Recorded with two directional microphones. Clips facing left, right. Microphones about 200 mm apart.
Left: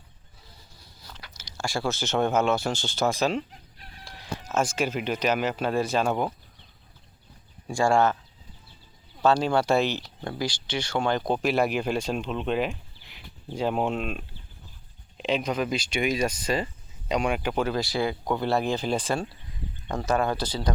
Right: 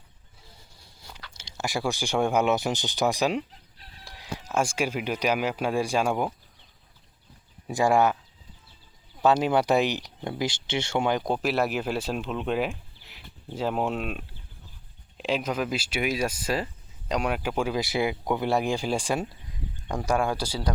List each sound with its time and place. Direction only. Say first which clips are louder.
0.5 s vehicle: left 3 dB; 25° right (ahead or behind)
1.4 s speech: even; 20° right (ahead or behind)
3.8 s chicken: left 2 dB; 50° left (ahead or behind)
4.0 s chicken: left 1 dB; 10° right (ahead or behind)
4.5 s speech: even; 10° right (ahead or behind)
7.7 s speech: even; 15° right (ahead or behind)
9.2 s speech: even; 15° right (ahead or behind)
11.0 s speech: left 3 dB; 10° right (ahead or behind)